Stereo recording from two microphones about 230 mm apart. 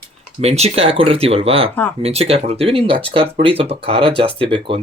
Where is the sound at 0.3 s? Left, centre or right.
Right.